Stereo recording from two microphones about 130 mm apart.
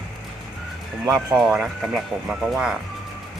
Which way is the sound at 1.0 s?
20° right (ahead or behind).